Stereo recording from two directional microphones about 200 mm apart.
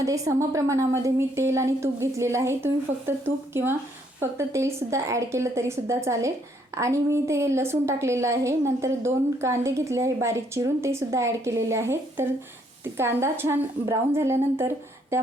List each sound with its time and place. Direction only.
0.0 s a woman's voice: 15° right (ahead or behind)